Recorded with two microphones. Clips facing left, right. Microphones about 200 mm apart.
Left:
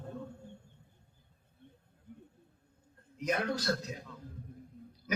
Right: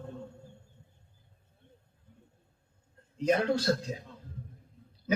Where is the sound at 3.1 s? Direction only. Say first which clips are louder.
Right 6 dB; 30° right (ahead or behind).